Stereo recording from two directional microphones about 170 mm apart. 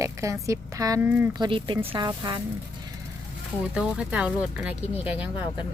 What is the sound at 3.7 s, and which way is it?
Speech, 5° right (ahead or behind).